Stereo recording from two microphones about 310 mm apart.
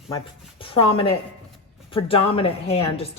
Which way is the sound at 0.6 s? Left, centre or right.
Centre.